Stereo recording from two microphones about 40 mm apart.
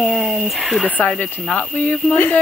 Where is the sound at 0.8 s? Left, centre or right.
Left.